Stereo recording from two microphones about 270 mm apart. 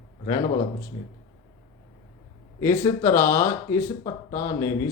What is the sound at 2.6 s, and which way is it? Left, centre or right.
Speech, centre.